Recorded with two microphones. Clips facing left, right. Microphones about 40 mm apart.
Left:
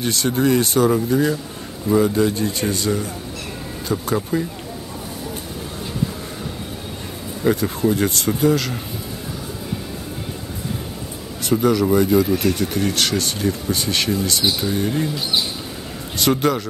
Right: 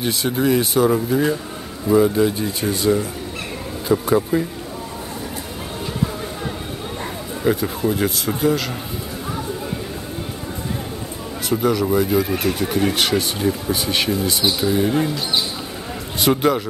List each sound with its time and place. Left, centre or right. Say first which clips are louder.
0.0 s speech: left 1 dB; centre
7.4 s speech: left 1 dB; centre
11.4 s speech: left 2 dB; centre
12.3 s speech: left 1 dB; centre
16.2 s speech: right 1 dB; centre